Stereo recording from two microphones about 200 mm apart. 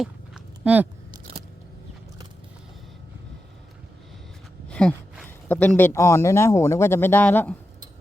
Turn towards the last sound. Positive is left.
turn(degrees=5)  # may be behind; listen again after turning